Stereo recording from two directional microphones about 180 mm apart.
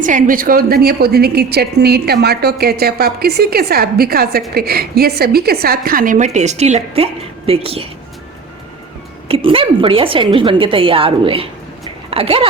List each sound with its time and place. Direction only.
0.0 s a woman's voice: 45° right (ahead or behind)
9.3 s a woman's voice: 30° right (ahead or behind)